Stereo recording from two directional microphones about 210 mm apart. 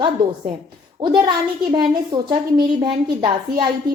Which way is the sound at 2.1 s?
20° right (ahead or behind).